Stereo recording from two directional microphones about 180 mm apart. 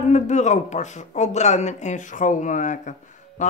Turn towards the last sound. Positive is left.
turn(degrees=40)  # may be behind; listen again after turning